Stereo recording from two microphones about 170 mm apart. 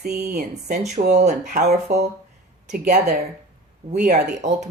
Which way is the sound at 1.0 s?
45° right (ahead or behind).